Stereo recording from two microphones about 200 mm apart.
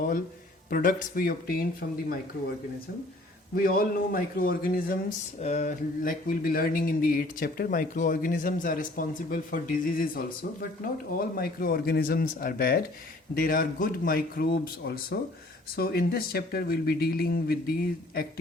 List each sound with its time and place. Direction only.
0.7 s speech: 45° left (ahead or behind)
3.5 s speech: 45° left (ahead or behind)
5.4 s speech: 35° left (ahead or behind); by 18.3 s 50° left (ahead or behind)